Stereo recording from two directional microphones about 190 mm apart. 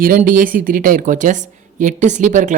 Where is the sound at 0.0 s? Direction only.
45° right (ahead or behind).